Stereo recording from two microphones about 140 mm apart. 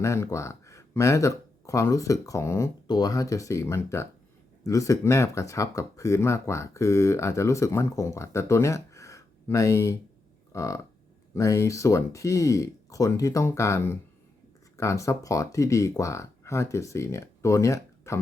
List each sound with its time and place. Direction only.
0.0 s speech: 20° left (ahead or behind)
2.8 s speech: 30° left (ahead or behind)
10.5 s a sound: 25° left (ahead or behind)
11.3 s speech: 20° left (ahead or behind)